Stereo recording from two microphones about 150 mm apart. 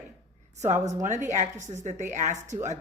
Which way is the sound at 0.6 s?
55° right (ahead or behind).